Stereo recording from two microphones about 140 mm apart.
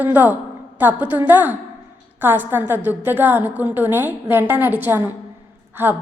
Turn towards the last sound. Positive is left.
turn(degrees=-15)  # may be behind; listen again after turning